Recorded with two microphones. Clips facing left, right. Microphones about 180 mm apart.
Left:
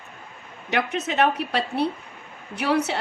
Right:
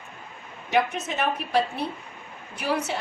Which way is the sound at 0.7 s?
65° left (ahead or behind).